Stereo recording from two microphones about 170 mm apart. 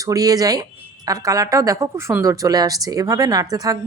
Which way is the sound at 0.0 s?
20° right (ahead or behind).